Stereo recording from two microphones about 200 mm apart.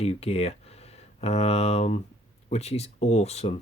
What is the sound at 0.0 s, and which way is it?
Speech, 30° left (ahead or behind).